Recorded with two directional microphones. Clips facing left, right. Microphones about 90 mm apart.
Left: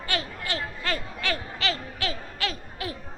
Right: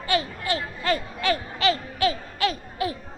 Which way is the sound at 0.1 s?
10° right (ahead or behind).